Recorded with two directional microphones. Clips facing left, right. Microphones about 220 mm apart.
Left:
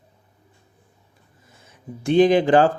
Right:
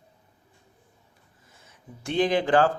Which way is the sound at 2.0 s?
15° left (ahead or behind).